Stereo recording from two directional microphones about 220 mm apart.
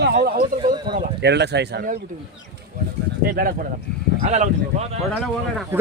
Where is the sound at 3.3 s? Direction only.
40° right (ahead or behind).